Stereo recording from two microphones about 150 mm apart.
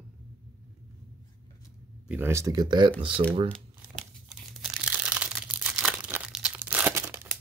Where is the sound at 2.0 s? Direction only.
10° right (ahead or behind); by 3.2 s 35° right (ahead or behind).